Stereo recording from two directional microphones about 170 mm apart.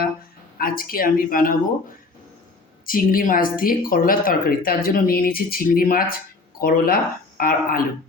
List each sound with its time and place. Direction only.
0.6 s speech: 60° left (ahead or behind)
2.8 s speech: 55° left (ahead or behind)